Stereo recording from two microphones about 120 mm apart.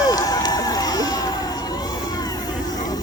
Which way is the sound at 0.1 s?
30° left (ahead or behind).